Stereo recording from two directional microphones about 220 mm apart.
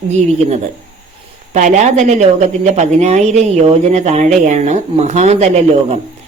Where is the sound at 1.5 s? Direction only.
35° right (ahead or behind).